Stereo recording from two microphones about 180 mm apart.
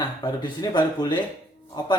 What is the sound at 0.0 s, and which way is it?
Speech, 25° left (ahead or behind).